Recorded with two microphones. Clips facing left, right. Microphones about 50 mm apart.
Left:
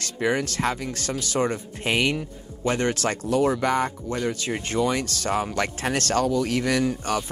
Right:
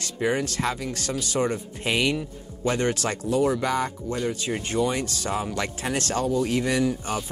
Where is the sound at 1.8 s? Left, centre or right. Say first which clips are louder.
Left 1 dB; left.